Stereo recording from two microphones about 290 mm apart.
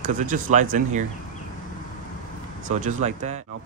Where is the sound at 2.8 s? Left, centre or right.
Right.